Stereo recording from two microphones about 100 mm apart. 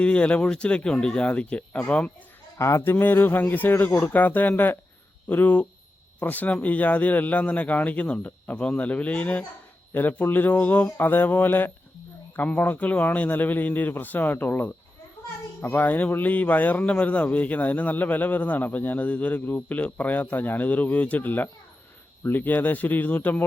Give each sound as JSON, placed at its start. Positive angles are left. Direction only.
{"t": 0.0, "sound": "a man's voice", "side_deg": 10}
{"t": 2.6, "sound": "a man's voice", "side_deg": 30}